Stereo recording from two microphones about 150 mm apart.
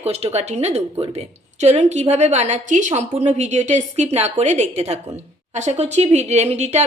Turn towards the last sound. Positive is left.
turn(degrees=-45)  # may be behind; listen again after turning